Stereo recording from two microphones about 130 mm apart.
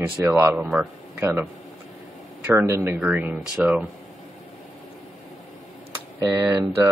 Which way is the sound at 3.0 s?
10° right (ahead or behind).